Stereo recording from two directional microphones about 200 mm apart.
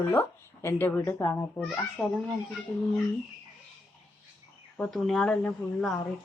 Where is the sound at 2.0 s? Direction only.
Centre (ahead or behind).